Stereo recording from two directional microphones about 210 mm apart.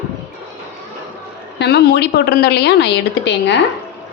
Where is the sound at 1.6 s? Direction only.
55° left (ahead or behind).